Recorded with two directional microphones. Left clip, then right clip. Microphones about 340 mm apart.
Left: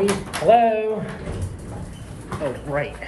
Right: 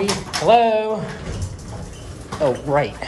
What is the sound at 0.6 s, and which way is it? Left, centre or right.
Speech, right.